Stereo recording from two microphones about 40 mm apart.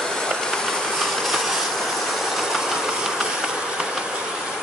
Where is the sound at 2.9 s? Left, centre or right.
Centre.